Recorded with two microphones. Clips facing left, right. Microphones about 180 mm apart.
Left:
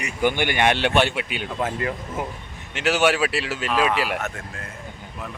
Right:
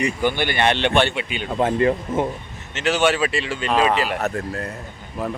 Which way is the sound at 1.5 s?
30° right (ahead or behind).